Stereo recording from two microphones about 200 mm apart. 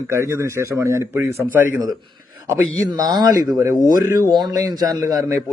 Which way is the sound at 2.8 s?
20° right (ahead or behind).